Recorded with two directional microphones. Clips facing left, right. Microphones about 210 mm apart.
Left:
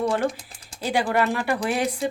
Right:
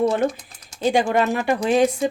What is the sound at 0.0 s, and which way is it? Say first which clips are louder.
Speech: right 4 dB; 25° right (ahead or behind).